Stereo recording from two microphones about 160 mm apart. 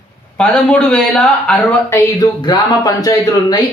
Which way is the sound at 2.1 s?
25° left (ahead or behind).